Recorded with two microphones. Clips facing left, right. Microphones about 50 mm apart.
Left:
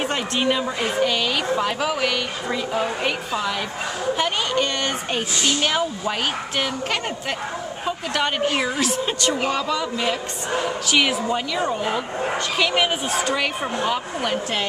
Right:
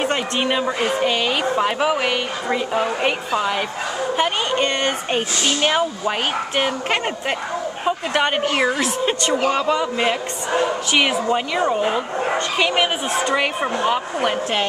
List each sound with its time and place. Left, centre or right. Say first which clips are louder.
0.0 s speech: right 2 dB; centre
4.2 s speech: right 3 dB; right